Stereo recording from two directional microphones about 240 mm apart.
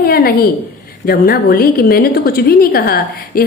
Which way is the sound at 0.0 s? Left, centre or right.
Left.